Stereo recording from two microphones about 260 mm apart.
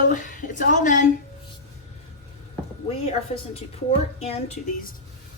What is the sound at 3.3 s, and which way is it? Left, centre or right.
Speech, left.